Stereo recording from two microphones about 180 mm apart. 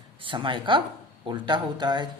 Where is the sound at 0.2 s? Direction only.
30° right (ahead or behind).